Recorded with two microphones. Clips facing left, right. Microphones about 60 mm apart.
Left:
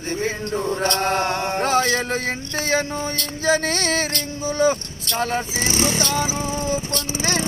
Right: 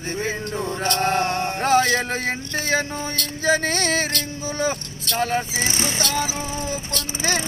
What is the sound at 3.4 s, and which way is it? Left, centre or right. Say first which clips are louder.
Music: even; centre.